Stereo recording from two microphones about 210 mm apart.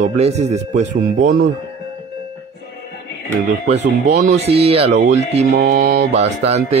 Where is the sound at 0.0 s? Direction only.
30° right (ahead or behind).